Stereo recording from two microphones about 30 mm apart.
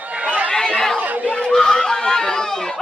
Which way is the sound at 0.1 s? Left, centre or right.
Right.